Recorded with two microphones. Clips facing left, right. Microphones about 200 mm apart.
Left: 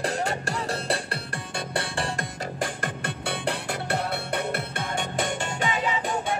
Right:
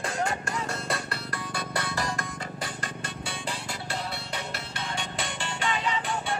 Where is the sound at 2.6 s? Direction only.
55° left (ahead or behind).